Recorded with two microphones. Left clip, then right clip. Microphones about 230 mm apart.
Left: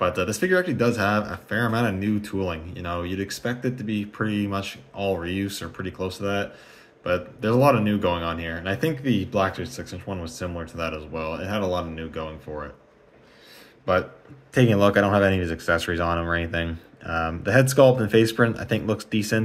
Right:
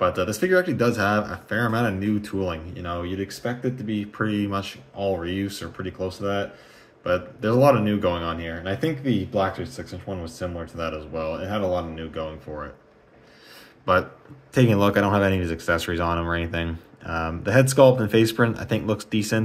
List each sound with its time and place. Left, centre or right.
0.0 s speech: centre
14.5 s speech: centre